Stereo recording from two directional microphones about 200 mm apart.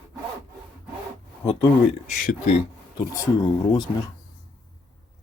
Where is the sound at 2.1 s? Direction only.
40° left (ahead or behind).